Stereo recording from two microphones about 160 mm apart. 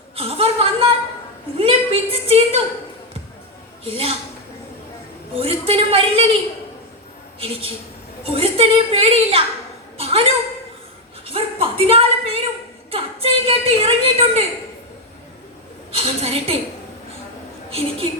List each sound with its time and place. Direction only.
0.2 s chuckle: 35° right (ahead or behind)
1.5 s a sound: 35° right (ahead or behind)
3.8 s a woman's voice: 35° right (ahead or behind)
5.3 s a woman's voice: 35° right (ahead or behind)
7.3 s a woman's voice: 35° right (ahead or behind)
11.3 s a sound: 35° right (ahead or behind)
15.9 s a woman's voice: 35° right (ahead or behind)
17.7 s a woman's voice: 35° right (ahead or behind)